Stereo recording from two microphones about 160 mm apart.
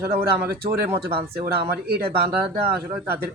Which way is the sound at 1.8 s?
85° right.